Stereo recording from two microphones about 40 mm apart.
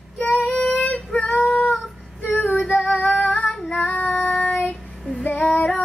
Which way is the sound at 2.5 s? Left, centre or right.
Left.